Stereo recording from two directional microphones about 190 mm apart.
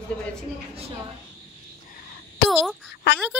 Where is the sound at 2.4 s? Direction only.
60° left (ahead or behind).